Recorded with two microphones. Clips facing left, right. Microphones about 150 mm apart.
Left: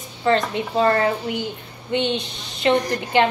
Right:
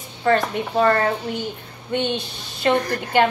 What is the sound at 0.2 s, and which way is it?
A woman's voice, 25° left (ahead or behind).